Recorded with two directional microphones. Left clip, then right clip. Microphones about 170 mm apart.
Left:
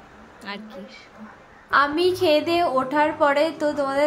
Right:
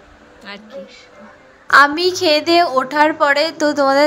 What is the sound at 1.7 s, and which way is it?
A woman's voice, 45° right (ahead or behind).